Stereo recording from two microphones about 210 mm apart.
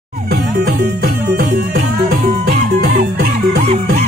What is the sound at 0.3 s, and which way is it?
Music, 45° right (ahead or behind).